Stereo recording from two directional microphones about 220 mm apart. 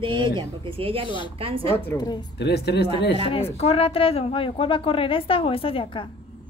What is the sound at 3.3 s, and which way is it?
Speech, 25° left (ahead or behind).